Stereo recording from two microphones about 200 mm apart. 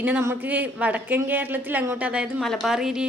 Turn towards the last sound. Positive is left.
turn(degrees=-5)  # may be behind; listen again after turning